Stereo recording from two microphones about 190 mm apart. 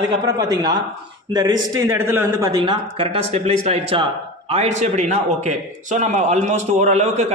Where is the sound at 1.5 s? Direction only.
90° right.